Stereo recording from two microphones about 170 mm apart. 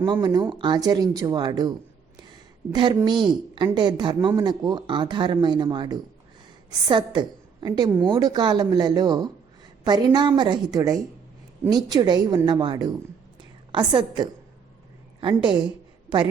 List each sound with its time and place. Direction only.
0.0 s a woman's voice: 25° right (ahead or behind)